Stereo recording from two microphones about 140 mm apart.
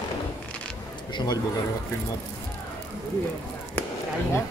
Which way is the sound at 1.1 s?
30° left (ahead or behind).